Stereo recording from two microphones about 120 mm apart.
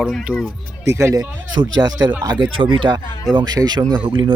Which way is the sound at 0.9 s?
25° right (ahead or behind).